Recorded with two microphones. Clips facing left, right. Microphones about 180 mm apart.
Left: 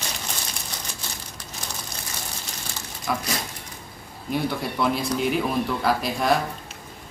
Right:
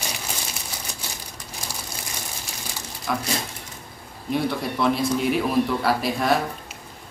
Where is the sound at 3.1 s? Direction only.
Centre (ahead or behind).